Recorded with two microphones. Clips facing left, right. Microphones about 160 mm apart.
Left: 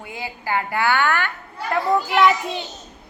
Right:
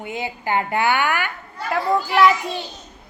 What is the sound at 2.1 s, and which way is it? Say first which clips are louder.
Speech: right 2 dB; centre (ahead or behind).